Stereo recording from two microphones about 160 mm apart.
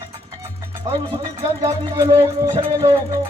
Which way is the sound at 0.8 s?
25° right (ahead or behind).